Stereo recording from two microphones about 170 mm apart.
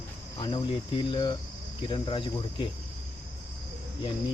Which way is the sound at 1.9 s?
30° left (ahead or behind).